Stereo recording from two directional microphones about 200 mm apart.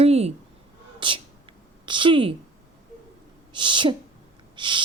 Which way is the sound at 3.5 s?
25° right (ahead or behind).